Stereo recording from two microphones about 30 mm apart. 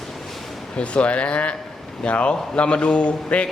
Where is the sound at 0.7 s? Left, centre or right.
Left.